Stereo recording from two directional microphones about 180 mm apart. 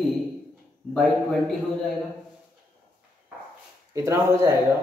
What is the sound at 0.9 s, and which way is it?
Speech, 5° left (ahead or behind).